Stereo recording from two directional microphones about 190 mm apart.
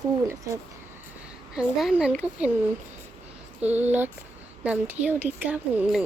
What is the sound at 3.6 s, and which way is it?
A woman's voice, 10° right (ahead or behind).